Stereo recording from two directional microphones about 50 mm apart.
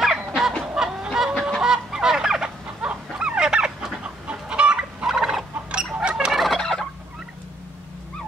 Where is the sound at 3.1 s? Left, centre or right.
Centre.